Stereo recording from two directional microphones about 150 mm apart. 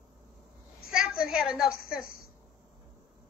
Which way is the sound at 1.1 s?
5° right (ahead or behind).